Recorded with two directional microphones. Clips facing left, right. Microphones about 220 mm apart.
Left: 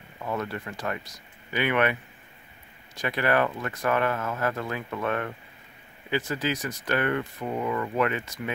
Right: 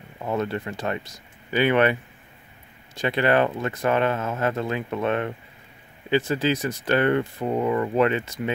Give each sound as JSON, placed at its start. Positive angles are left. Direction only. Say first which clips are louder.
{"t": 0.2, "sound": "speech", "louder": "right 5 dB", "side_deg": -25}
{"t": 3.0, "sound": "speech", "louder": "right 4 dB", "side_deg": -25}